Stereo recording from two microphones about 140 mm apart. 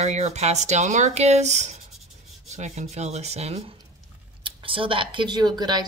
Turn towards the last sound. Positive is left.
turn(degrees=-30)  # may be behind; listen again after turning